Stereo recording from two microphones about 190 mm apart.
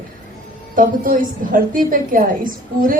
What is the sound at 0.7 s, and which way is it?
A woman's voice, 45° right (ahead or behind).